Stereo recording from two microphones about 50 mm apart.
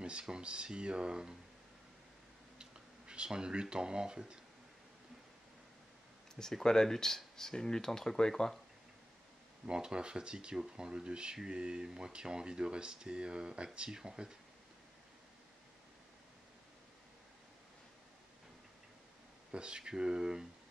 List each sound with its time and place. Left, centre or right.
0.0 s speech: centre
2.6 s speech: centre
6.4 s speech: centre
9.7 s speech: centre
19.5 s speech: centre